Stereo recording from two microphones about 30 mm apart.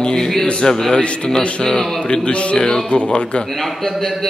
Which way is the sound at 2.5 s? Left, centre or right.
Left.